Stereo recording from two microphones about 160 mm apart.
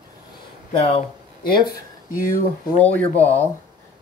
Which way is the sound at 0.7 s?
35° left (ahead or behind).